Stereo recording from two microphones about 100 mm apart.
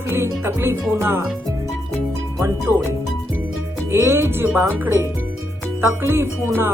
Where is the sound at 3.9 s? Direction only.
25° right (ahead or behind).